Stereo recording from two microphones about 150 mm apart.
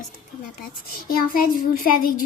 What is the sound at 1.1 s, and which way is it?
A child's voice, 75° left (ahead or behind).